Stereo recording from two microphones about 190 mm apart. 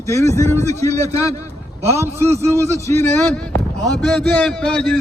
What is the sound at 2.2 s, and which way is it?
Speech, 35° right (ahead or behind).